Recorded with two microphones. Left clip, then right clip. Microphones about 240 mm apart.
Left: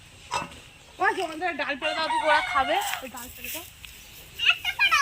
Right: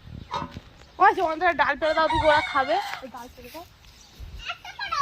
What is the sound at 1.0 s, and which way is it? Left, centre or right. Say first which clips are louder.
Speech: right 6 dB; centre.